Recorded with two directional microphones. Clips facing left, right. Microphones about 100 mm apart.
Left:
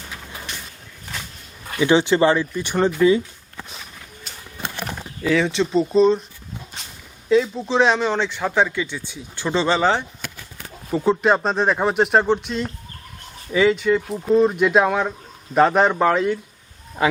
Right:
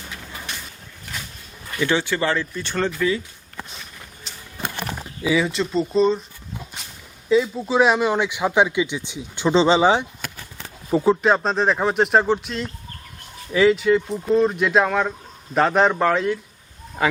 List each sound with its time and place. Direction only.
1.8 s speech: 20° left (ahead or behind)
5.2 s speech: 5° right (ahead or behind)
7.3 s speech: centre (ahead or behind)
11.0 s speech: centre (ahead or behind)